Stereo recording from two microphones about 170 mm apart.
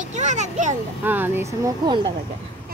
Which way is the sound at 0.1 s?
45° right (ahead or behind).